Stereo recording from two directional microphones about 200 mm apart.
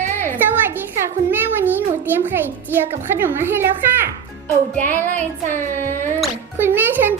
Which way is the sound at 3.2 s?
10° right (ahead or behind).